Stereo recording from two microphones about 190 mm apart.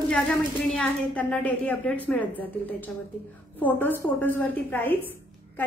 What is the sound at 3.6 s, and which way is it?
A woman's voice, 10° left (ahead or behind).